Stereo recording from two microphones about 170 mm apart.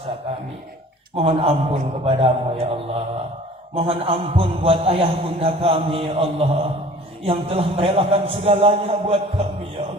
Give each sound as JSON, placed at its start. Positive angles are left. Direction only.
{"t": 1.1, "sound": "a man's voice", "side_deg": -35}
{"t": 3.8, "sound": "a man's voice", "side_deg": -35}